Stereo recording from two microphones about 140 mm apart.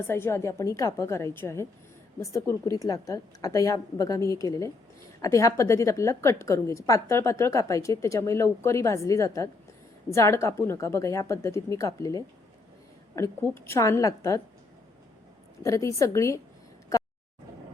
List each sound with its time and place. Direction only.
0.1 s a woman's voice: 15° left (ahead or behind)
15.6 s a woman's voice: 20° left (ahead or behind)